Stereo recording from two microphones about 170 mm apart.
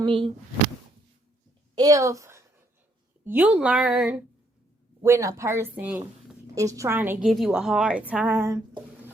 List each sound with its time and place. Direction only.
0.0 s speech: 30° right (ahead or behind)
1.7 s a woman's voice: 20° right (ahead or behind)
5.0 s a woman's voice: 15° right (ahead or behind)
7.3 s a woman's voice: centre (ahead or behind)